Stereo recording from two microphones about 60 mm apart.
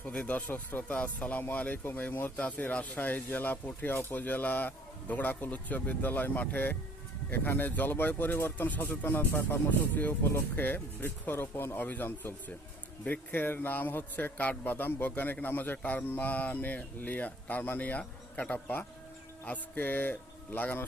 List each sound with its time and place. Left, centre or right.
0.2 s a man's voice: left